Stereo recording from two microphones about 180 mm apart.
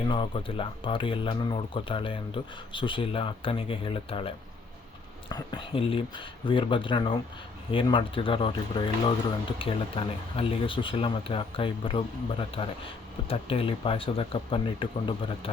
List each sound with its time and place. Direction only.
0.1 s speech: 30° left (ahead or behind)